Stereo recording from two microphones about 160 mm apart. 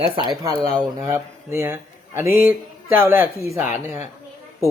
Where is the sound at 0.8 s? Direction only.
20° right (ahead or behind).